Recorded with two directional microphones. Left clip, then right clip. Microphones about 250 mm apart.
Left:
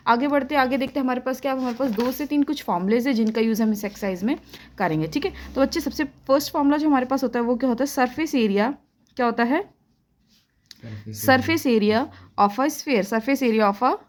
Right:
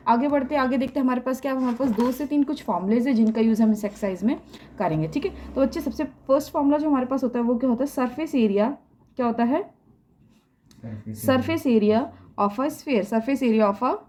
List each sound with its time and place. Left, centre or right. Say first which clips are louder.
0.0 s a woman's voice: left 1 dB; left
11.1 s a woman's voice: left 4 dB; left